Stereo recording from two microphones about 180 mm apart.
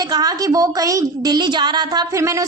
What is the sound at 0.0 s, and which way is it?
A woman's voice, 20° right (ahead or behind).